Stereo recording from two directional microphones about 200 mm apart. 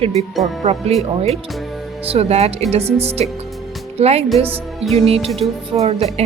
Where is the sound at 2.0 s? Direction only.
30° right (ahead or behind).